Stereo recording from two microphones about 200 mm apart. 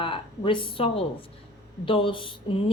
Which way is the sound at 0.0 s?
25° left (ahead or behind).